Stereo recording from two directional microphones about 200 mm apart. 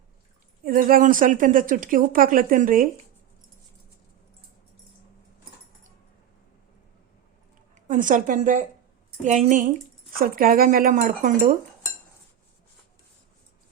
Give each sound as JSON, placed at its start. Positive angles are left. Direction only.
{"t": 0.6, "sound": "speech", "side_deg": -45}
{"t": 7.9, "sound": "a woman's voice", "side_deg": -40}